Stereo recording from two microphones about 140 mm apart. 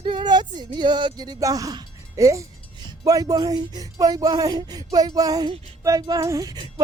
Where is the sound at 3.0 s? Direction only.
25° right (ahead or behind).